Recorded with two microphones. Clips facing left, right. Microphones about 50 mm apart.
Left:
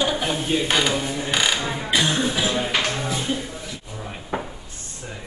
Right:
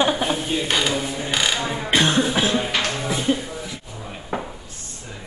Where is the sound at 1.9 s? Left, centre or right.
Right.